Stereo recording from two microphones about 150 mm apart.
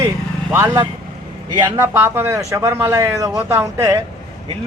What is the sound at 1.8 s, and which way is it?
A man's voice, 15° right (ahead or behind).